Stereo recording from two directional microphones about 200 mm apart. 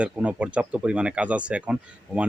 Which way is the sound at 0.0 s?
5° right (ahead or behind).